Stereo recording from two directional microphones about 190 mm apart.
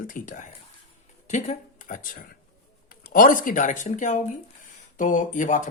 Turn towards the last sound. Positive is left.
turn(degrees=40)  # may be behind; listen again after turning